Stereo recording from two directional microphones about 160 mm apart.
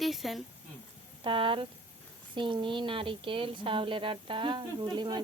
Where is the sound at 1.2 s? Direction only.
35° right (ahead or behind).